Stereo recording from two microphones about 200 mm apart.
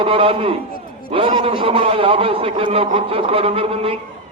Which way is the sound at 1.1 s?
25° right (ahead or behind).